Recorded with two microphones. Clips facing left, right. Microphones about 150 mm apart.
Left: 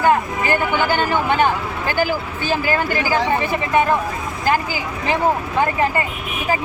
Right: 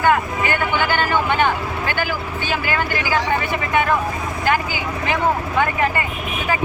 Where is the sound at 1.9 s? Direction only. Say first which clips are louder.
Left 7 dB; 40° left (ahead or behind).